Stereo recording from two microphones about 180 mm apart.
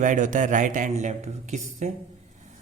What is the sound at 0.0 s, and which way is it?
Speech, 45° right (ahead or behind).